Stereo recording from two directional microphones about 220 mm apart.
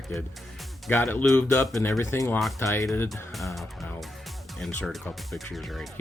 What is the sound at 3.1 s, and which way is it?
Speech, centre (ahead or behind).